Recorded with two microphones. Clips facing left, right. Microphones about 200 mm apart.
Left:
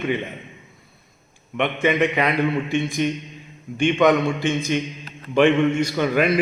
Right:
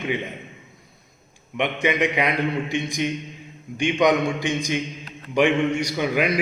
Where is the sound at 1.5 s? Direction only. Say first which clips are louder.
Left 2 dB; 15° right (ahead or behind).